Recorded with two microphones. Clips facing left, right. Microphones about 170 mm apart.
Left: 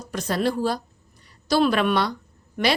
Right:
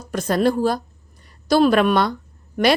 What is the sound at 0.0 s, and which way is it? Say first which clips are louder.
A woman's voice: right 5 dB; 50° right (ahead or behind).